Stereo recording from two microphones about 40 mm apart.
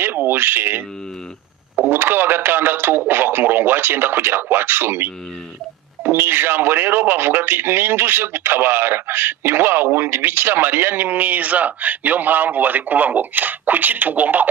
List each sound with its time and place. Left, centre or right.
0.0 s speech: right
1.9 s speech: right